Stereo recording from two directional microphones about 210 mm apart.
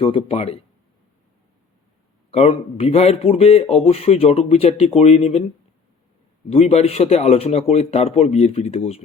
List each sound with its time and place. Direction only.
0.0 s a man's voice: 25° left (ahead or behind)
2.3 s a man's voice: 30° left (ahead or behind)
6.5 s a man's voice: 30° left (ahead or behind)